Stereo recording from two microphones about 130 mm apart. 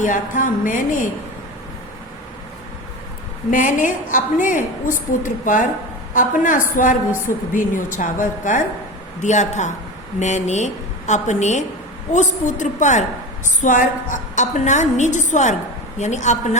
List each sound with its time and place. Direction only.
0.0 s a sound: 80° left
3.5 s a woman's voice: 80° left
6.1 s a woman's voice: 85° left
9.2 s a woman's voice: 65° left (ahead or behind)
13.6 s a woman's voice: 80° left; by 16.6 s 65° left (ahead or behind)